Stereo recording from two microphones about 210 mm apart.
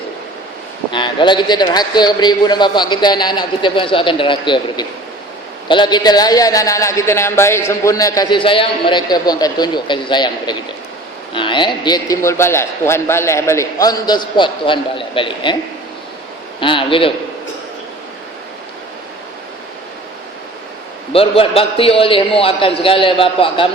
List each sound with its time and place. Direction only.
0.9 s a man's voice: 20° left (ahead or behind)
16.6 s a man's voice: 25° left (ahead or behind)
21.1 s a man's voice: 25° left (ahead or behind)